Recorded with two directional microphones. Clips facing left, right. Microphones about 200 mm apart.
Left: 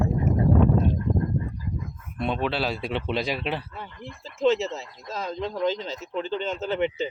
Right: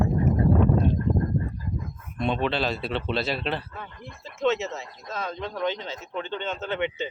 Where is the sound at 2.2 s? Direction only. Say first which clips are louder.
Right 1 dB; 5° left (ahead or behind).